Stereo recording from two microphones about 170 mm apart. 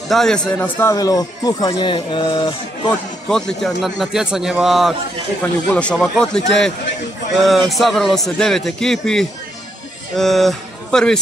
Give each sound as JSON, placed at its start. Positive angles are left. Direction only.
{"t": 0.1, "sound": "a man's voice", "side_deg": 5}
{"t": 0.8, "sound": "speech", "side_deg": 20}
{"t": 3.3, "sound": "a man's voice", "side_deg": 5}